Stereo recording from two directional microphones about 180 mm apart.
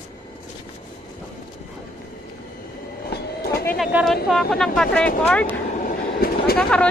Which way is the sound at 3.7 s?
Centre (ahead or behind).